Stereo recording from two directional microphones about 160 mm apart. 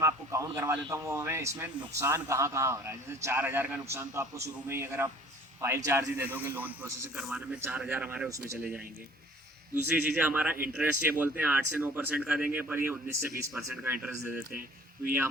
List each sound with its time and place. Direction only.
0.0 s a man's voice: 20° right (ahead or behind)
9.9 s a man's voice: 10° right (ahead or behind)